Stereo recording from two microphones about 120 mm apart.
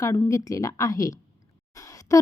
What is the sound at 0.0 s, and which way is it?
Speech, 25° left (ahead or behind).